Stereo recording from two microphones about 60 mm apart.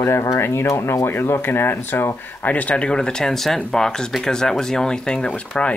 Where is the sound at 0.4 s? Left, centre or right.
Left.